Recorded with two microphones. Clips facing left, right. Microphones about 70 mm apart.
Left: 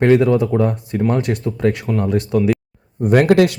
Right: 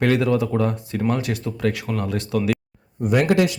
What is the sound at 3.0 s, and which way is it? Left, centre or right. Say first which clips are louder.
Speech: left 6 dB; left.